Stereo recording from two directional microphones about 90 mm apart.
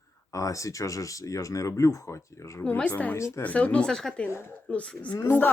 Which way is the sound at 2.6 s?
10° left (ahead or behind).